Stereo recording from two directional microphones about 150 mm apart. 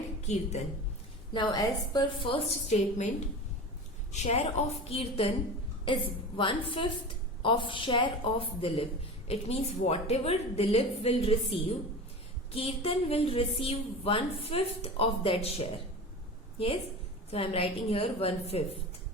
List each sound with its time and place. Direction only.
1.3 s a woman's voice: 30° left (ahead or behind)
2.2 s a woman's voice: 45° left (ahead or behind)
4.1 s a woman's voice: 50° left (ahead or behind)
17.3 s a woman's voice: 40° left (ahead or behind)